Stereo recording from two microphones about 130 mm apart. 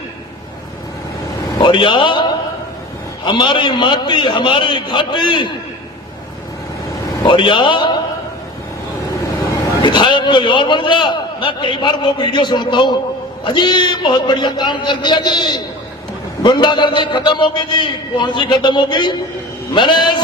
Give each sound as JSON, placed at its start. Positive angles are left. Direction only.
{"t": 1.5, "sound": "a man's voice", "side_deg": 35}
{"t": 7.1, "sound": "a man's voice", "side_deg": 30}
{"t": 9.8, "sound": "a man's voice", "side_deg": 35}